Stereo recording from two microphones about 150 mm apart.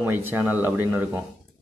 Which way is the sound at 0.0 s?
15° right (ahead or behind).